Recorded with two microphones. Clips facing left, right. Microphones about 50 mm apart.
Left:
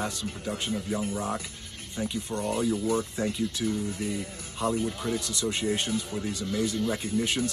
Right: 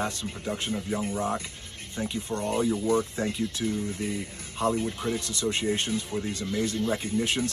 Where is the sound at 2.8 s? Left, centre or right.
Right.